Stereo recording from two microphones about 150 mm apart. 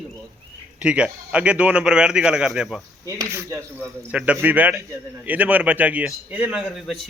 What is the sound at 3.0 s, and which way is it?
Speech, 20° right (ahead or behind).